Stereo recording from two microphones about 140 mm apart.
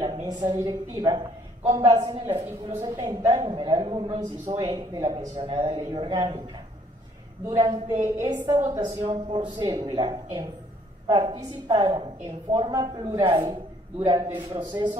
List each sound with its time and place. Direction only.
0.0 s a sound: 30° right (ahead or behind)
0.6 s a woman's voice: 30° right (ahead or behind)
2.8 s a woman's voice: 25° right (ahead or behind); by 4.7 s 40° right (ahead or behind)
4.7 s a woman's voice: 30° right (ahead or behind)
8.0 s a woman's voice: 20° right (ahead or behind)